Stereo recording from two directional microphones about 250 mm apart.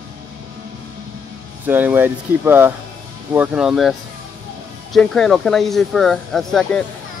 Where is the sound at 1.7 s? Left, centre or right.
Centre.